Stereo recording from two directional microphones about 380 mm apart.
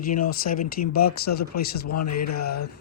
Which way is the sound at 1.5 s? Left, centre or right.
Left.